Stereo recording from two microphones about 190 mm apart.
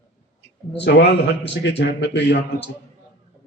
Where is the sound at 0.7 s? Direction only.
65° left (ahead or behind).